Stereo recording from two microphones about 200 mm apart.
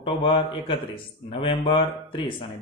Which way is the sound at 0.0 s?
25° left (ahead or behind).